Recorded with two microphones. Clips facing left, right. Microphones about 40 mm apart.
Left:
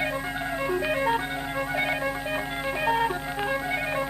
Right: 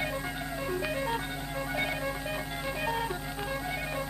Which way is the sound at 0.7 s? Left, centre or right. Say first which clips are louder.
Left 7 dB; left.